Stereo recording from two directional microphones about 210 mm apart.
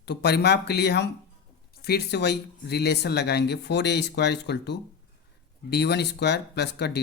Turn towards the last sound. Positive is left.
turn(degrees=55)  # may be behind; listen again after turning